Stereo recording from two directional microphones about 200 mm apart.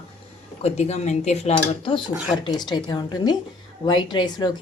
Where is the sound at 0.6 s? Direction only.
30° left (ahead or behind).